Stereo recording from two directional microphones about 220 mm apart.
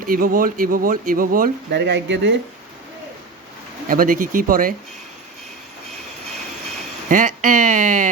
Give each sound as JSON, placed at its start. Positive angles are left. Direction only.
{"t": 0.0, "sound": "speech", "side_deg": -40}
{"t": 3.8, "sound": "speech", "side_deg": -40}
{"t": 7.1, "sound": "speech", "side_deg": -35}